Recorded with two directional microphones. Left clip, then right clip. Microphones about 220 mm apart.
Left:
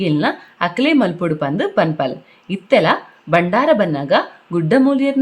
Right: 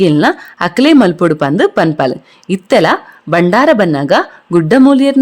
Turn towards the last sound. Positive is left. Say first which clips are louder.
# right 6 dB
turn(degrees=-45)  # may be behind; listen again after turning